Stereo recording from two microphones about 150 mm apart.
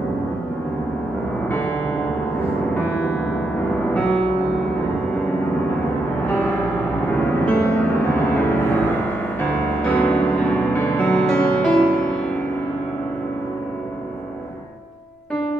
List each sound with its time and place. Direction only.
1.5 s music: 10° left (ahead or behind)
3.9 s music: 10° left (ahead or behind)
7.4 s music: 10° left (ahead or behind)
10.0 s music: 10° left (ahead or behind)